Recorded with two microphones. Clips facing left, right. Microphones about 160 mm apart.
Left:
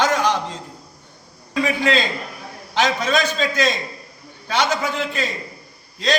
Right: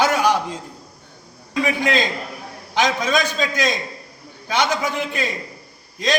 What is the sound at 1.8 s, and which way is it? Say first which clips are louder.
A man's voice: left 1 dB; 15° right (ahead or behind).